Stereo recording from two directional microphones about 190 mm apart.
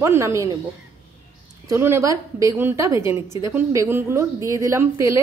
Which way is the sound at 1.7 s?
15° right (ahead or behind).